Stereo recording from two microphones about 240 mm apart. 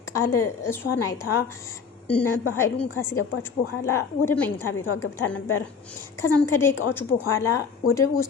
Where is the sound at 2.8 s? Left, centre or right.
Centre.